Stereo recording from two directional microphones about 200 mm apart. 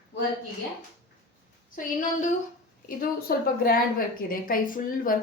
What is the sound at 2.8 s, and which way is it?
A woman's voice, 45° left (ahead or behind).